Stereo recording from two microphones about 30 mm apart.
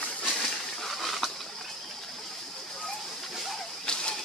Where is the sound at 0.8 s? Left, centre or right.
Centre.